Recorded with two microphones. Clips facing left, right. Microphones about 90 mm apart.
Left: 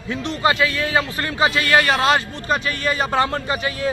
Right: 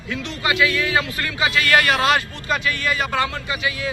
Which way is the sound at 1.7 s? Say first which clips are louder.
Even; 25° left (ahead or behind).